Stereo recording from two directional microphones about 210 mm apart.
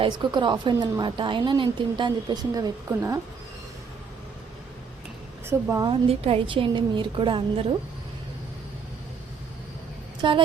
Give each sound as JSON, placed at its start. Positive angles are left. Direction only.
{"t": 0.0, "sound": "a woman's voice", "side_deg": -20}
{"t": 5.5, "sound": "speech", "side_deg": -15}
{"t": 5.9, "sound": "a woman's voice", "side_deg": -25}
{"t": 10.2, "sound": "speech", "side_deg": -25}